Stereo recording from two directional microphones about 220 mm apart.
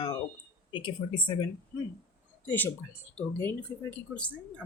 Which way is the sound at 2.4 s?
10° left (ahead or behind).